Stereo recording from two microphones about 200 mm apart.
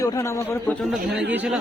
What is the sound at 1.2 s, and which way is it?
Speech, 5° right (ahead or behind).